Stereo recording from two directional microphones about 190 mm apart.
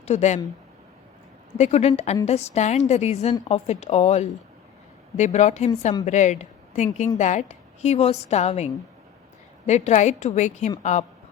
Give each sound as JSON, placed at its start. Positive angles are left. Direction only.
{"t": 0.0, "sound": "speech", "side_deg": 35}
{"t": 1.5, "sound": "a woman's voice", "side_deg": 35}